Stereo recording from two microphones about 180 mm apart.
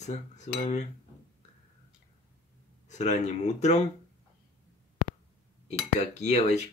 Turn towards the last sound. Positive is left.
turn(degrees=40)  # may be behind; listen again after turning